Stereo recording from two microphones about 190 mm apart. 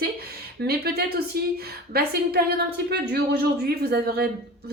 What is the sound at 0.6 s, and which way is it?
A woman's voice, 55° right (ahead or behind).